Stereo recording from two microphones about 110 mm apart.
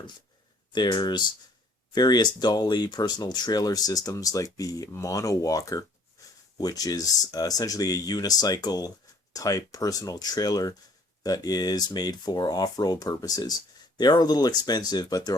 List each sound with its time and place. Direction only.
0.7 s speech: 40° left (ahead or behind)